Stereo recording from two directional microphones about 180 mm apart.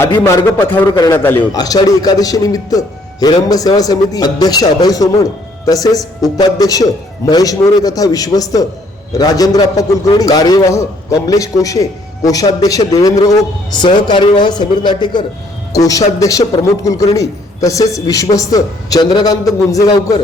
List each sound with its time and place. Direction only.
0.0 s a man's voice: 15° left (ahead or behind)